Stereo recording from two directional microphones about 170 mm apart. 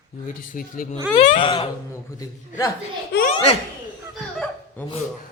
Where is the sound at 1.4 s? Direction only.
30° left (ahead or behind).